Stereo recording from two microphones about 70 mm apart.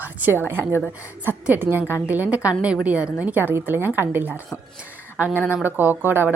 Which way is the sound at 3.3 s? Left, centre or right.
Right.